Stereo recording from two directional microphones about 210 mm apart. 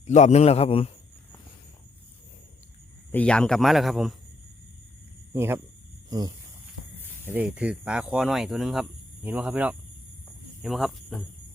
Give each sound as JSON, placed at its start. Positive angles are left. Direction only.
{"t": 0.0, "sound": "a man's voice", "side_deg": 35}
{"t": 3.1, "sound": "speech", "side_deg": 5}
{"t": 5.3, "sound": "speech", "side_deg": -10}
{"t": 7.3, "sound": "speech", "side_deg": -5}